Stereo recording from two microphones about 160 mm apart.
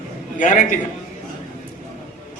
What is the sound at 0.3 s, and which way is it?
Speech, 50° left (ahead or behind).